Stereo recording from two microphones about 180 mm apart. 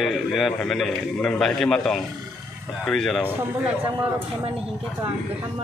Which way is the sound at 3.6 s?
10° right (ahead or behind).